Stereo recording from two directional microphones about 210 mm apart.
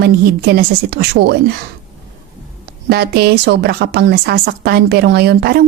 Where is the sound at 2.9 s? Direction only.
50° right (ahead or behind).